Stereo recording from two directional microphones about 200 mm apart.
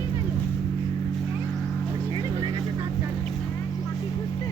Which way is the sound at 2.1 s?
25° right (ahead or behind).